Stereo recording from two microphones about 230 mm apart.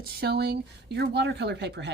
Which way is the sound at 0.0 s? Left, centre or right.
Right.